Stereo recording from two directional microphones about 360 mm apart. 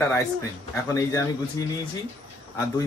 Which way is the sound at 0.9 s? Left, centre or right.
Centre.